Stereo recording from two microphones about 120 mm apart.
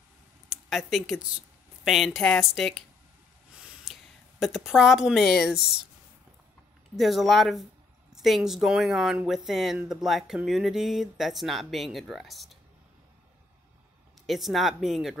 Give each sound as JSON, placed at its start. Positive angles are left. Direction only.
{"t": 0.5, "sound": "speech", "side_deg": 0}
{"t": 3.5, "sound": "a sound", "side_deg": -5}
{"t": 4.4, "sound": "speech", "side_deg": 0}
{"t": 7.0, "sound": "speech", "side_deg": 0}
{"t": 14.2, "sound": "speech", "side_deg": 0}